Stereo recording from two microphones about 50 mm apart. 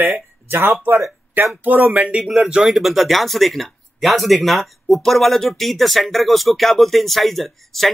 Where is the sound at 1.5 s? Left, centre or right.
Right.